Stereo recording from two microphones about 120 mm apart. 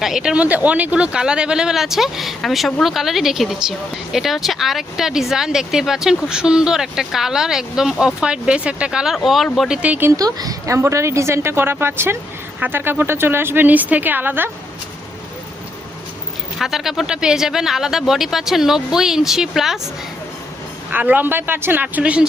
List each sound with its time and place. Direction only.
0.0 s speech: 5° right (ahead or behind)
10.1 s a woman's voice: 30° right (ahead or behind)
16.6 s speech: 5° right (ahead or behind)
20.9 s speech: 15° right (ahead or behind)